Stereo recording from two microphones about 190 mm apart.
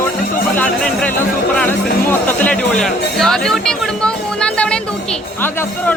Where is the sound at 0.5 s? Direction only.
5° left (ahead or behind).